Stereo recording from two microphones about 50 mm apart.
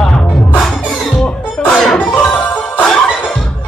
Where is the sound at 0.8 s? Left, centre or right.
Left.